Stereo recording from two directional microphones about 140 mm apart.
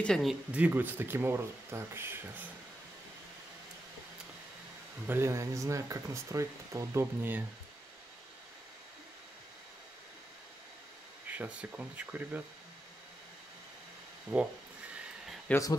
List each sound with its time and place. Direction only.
0.0 s speech: centre (ahead or behind); by 2.4 s 15° right (ahead or behind)
5.0 s speech: 15° right (ahead or behind)
11.3 s speech: 10° right (ahead or behind)
14.3 s speech: centre (ahead or behind)
15.5 s speech: 10° left (ahead or behind)